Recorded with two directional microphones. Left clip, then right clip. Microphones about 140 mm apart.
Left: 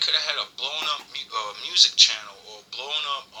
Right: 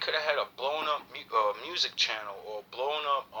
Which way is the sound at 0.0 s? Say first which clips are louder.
Left 5 dB; 45° right (ahead or behind).